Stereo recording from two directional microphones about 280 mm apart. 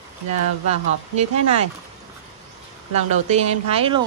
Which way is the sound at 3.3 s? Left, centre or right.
Right.